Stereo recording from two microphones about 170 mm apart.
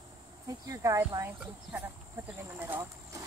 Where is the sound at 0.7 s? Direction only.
15° right (ahead or behind).